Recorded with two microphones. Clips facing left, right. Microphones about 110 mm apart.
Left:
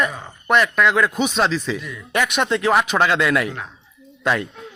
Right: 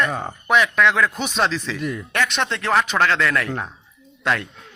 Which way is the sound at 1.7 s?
55° right (ahead or behind).